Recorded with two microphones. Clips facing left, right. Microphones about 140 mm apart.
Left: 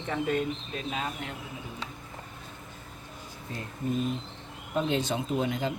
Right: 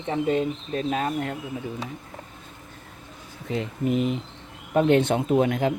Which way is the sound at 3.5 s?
80° right.